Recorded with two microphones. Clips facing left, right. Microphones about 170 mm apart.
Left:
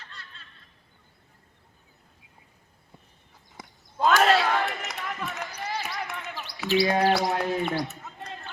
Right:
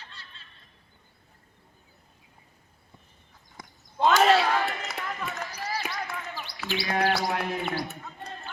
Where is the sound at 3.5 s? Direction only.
Centre (ahead or behind).